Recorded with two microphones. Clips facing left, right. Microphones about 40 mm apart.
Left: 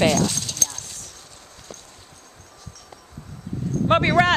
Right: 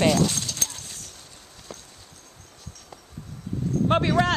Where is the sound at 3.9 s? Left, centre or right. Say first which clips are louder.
Left 5 dB; left.